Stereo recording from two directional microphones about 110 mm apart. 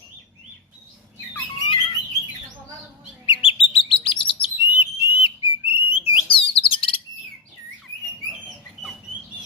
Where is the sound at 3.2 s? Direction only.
50° left (ahead or behind).